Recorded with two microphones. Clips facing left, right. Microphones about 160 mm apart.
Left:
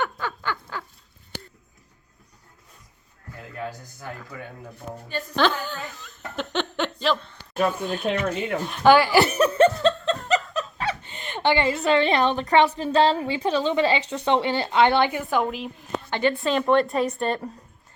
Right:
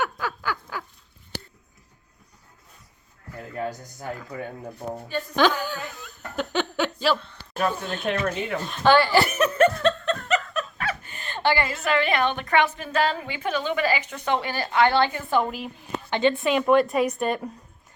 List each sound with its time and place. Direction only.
0.0 s a sound: 5° right (ahead or behind)
3.7 s a woman's voice: 20° right (ahead or behind)
5.4 s speech: 10° right (ahead or behind)
5.9 s laughter: centre (ahead or behind)
7.6 s speech: 5° left (ahead or behind)
9.3 s snicker: 30° left (ahead or behind)
11.9 s a woman's voice: 30° left (ahead or behind); by 15.7 s centre (ahead or behind)
16.0 s a woman's voice: 15° right (ahead or behind)